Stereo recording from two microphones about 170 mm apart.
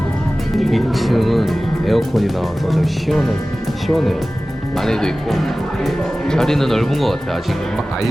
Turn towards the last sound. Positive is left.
turn(degrees=0)  # may be behind; listen again after turning